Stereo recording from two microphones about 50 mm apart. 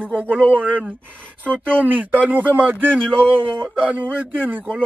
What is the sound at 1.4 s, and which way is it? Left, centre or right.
Speech, left.